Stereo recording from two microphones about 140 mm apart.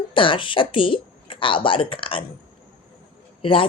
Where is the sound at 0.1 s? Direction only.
35° left (ahead or behind).